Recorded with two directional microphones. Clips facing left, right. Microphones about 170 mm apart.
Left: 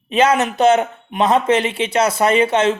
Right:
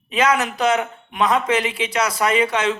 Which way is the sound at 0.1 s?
30° left (ahead or behind).